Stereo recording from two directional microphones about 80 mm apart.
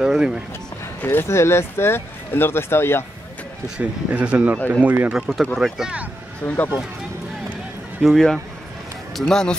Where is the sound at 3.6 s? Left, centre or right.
Centre.